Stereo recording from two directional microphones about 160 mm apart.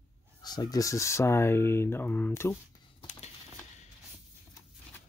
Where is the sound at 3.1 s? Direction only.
45° left (ahead or behind).